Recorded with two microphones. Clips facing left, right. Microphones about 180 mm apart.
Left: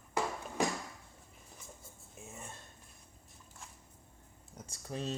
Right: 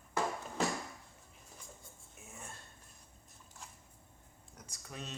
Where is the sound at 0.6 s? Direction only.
10° left (ahead or behind).